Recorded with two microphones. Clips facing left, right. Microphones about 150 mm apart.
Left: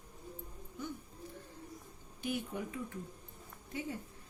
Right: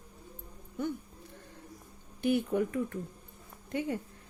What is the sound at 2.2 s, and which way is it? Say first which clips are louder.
A woman's voice: right 10 dB; 55° right (ahead or behind).